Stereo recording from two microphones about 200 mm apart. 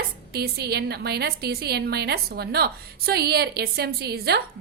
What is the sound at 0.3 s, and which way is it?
A woman's voice, 50° right (ahead or behind).